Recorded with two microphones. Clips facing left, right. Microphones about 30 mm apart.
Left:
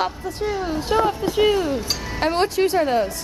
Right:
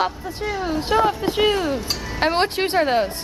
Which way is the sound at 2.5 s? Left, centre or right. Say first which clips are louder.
Even; right.